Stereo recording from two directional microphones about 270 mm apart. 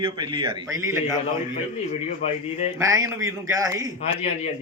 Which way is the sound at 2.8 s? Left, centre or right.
Centre.